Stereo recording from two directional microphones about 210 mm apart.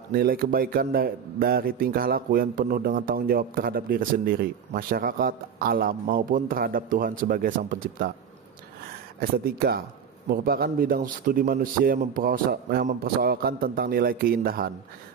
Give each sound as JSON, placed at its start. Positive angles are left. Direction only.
{"t": 0.1, "sound": "a man's voice", "side_deg": -45}
{"t": 9.2, "sound": "a man's voice", "side_deg": -45}